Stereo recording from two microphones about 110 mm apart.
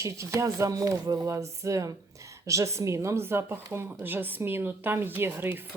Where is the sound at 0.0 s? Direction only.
25° right (ahead or behind).